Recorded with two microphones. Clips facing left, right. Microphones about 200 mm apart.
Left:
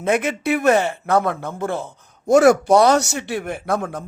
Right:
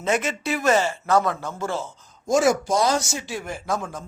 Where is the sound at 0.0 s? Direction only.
60° left (ahead or behind).